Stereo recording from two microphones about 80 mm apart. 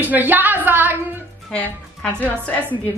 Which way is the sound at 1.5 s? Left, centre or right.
Centre.